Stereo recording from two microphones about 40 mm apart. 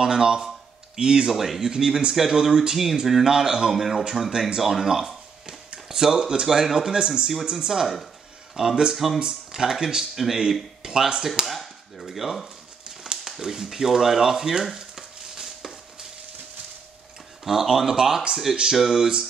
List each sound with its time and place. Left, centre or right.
0.0 s speech: centre
1.3 s speech: centre
1.6 s speech: centre
10.8 s speech: centre
11.4 s chop: centre
12.8 s a sound: centre
13.2 s speech: centre
14.8 s a sound: centre
17.5 s speech: centre